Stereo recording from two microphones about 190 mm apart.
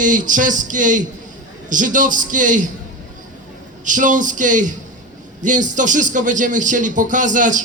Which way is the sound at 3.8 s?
40° right (ahead or behind).